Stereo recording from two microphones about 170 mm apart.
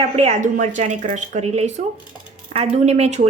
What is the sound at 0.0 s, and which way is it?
Speech, 40° right (ahead or behind).